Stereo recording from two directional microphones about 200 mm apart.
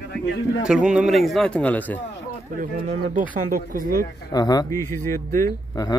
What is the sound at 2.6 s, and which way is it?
A man's voice, 40° right (ahead or behind).